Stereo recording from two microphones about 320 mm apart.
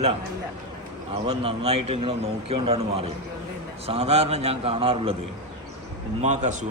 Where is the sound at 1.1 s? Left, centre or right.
Centre.